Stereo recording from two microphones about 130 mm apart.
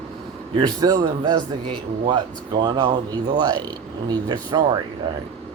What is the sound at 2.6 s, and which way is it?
Speech, 30° right (ahead or behind).